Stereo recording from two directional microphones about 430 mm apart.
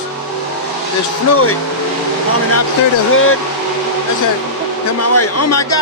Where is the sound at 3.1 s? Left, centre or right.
Left.